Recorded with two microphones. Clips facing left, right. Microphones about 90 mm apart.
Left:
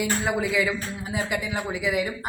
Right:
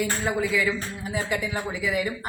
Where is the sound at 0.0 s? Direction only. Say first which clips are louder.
Left 1 dB; 15° left (ahead or behind).